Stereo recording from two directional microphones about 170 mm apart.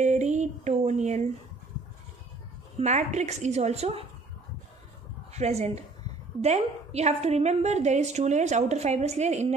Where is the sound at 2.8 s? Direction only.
45° right (ahead or behind).